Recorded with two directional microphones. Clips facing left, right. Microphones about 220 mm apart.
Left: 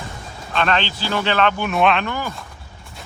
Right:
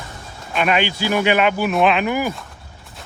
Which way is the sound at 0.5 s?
10° right (ahead or behind).